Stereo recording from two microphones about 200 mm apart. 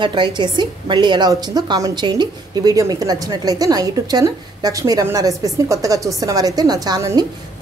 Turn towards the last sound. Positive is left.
turn(degrees=-15)  # may be behind; listen again after turning